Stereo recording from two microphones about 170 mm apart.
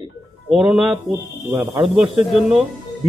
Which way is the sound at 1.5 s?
20° right (ahead or behind).